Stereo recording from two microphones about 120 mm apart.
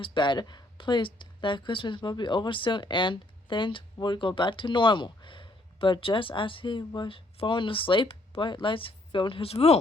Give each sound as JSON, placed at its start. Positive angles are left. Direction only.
{"t": 0.0, "sound": "speech", "side_deg": 40}